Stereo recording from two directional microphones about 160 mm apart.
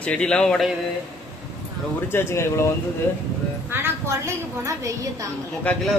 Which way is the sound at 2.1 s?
15° left (ahead or behind).